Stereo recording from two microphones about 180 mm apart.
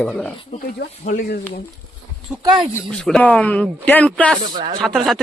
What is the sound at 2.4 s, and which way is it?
Speech, 25° right (ahead or behind).